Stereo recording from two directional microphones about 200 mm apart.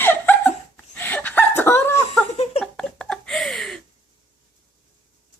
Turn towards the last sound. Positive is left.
turn(degrees=0)  # may be behind; listen again after turning